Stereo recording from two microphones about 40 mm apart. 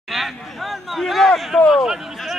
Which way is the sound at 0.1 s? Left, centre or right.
Centre.